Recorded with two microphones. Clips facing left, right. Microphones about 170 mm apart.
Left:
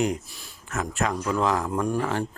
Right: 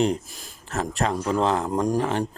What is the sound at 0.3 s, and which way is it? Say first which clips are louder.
Speech: right 2 dB; 45° right (ahead or behind).